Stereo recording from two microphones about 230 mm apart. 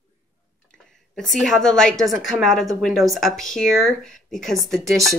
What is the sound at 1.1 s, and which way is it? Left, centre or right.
Speech, centre.